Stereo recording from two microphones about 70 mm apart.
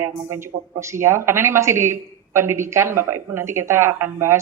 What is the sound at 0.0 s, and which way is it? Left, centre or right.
Speech, right.